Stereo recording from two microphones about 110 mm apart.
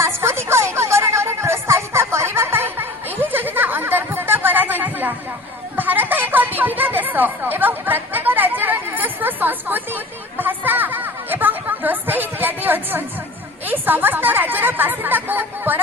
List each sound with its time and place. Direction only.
0.0 s a sound: 25° right (ahead or behind)
5.7 s music: 15° right (ahead or behind)
13.7 s chatter: 15° right (ahead or behind)